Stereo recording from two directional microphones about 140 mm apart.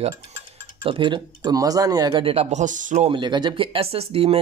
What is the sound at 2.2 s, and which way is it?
Speech, 45° right (ahead or behind).